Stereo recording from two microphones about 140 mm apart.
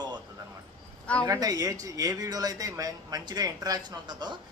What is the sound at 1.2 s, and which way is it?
A man's voice, 25° right (ahead or behind).